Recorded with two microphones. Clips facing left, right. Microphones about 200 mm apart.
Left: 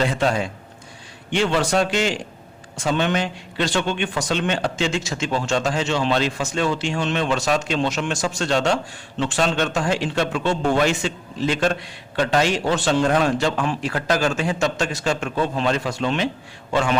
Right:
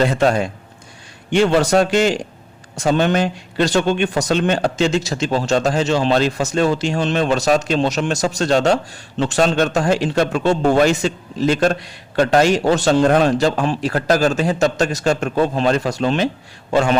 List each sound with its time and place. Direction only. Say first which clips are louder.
0.0 s a man's voice: right 5 dB; 50° right (ahead or behind)